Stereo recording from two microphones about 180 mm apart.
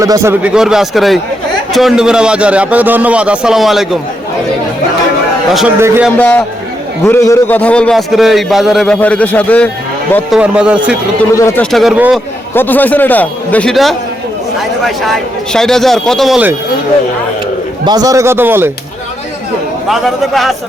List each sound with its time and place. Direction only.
0.0 s a man's voice: 15° right (ahead or behind)
0.5 s a man's voice: 5° right (ahead or behind)
5.8 s a man's voice: 15° right (ahead or behind)
6.1 s a man's voice: 5° left (ahead or behind)
10.2 s a man's voice: 5° right (ahead or behind)
11.3 s a man's voice: 15° left (ahead or behind)
11.6 s a man's voice: centre (ahead or behind)
12.5 s a man's voice: 10° left (ahead or behind)
17.8 s a man's voice: 20° right (ahead or behind)
19.9 s a man's voice: centre (ahead or behind)